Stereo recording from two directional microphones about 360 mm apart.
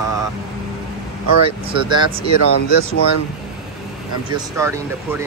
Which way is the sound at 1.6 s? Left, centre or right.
Centre.